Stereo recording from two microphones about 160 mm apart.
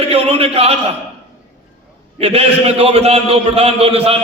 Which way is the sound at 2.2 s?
40° right (ahead or behind).